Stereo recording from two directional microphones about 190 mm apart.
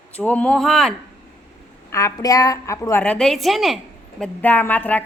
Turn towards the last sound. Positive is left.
turn(degrees=10)  # may be behind; listen again after turning